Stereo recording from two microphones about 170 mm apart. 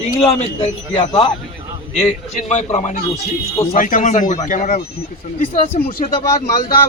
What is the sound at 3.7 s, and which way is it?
Speech, 50° left (ahead or behind).